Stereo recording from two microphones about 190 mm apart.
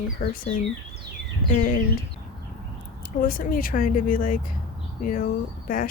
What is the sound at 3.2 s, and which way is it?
Speech, 45° left (ahead or behind).